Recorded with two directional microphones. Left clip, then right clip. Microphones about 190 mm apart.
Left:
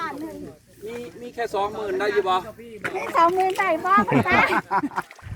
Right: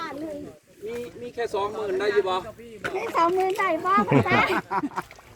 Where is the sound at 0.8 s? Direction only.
10° left (ahead or behind).